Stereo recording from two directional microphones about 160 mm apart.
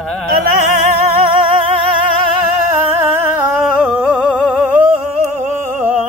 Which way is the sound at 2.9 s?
10° right (ahead or behind).